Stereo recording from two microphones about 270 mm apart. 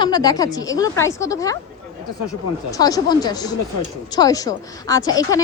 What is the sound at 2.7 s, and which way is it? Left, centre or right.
Speech, centre.